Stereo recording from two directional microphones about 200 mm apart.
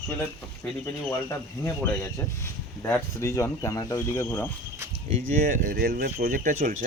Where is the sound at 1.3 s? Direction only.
10° left (ahead or behind).